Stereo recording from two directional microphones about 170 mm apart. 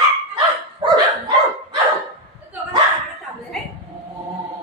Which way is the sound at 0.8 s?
25° right (ahead or behind).